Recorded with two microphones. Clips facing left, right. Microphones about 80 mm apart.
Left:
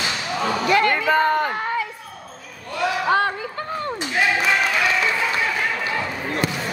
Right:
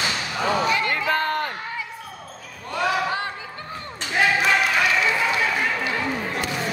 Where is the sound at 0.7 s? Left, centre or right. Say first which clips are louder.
Left 5 dB; left.